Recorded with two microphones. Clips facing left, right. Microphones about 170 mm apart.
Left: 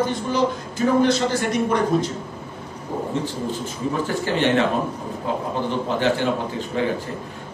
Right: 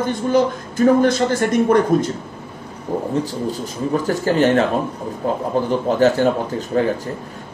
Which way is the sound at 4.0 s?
40° right (ahead or behind).